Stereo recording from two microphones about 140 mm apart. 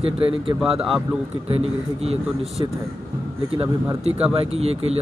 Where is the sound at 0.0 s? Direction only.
40° right (ahead or behind).